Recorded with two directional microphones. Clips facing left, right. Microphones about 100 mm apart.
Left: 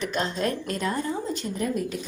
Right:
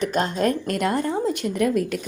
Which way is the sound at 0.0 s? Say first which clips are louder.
Right 5 dB; 45° right (ahead or behind).